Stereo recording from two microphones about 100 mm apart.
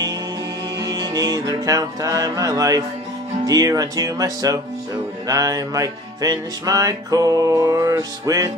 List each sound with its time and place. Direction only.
0.8 s music: 40° right (ahead or behind)